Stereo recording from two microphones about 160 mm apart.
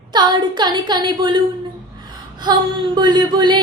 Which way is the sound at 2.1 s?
25° right (ahead or behind).